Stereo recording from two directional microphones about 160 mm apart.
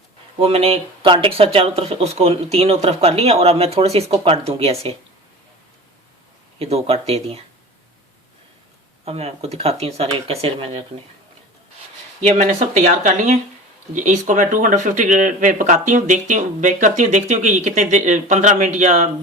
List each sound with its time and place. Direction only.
0.3 s speech: 35° right (ahead or behind)
6.6 s speech: 40° right (ahead or behind)
9.0 s speech: 40° right (ahead or behind)
12.4 s speech: 45° right (ahead or behind)